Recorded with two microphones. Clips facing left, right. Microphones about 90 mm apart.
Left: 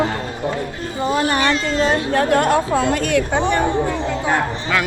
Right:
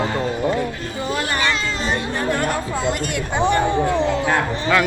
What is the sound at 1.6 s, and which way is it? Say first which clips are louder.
Speech: left 5 dB; 85° left.